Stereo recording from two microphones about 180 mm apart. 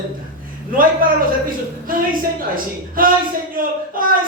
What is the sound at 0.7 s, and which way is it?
A man's voice, 50° right (ahead or behind).